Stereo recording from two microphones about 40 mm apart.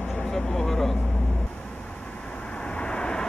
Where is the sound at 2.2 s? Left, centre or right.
Left.